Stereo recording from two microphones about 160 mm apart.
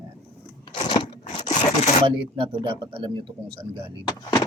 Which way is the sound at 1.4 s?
45° left (ahead or behind).